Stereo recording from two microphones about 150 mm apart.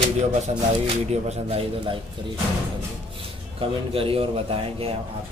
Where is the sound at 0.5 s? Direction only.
45° right (ahead or behind).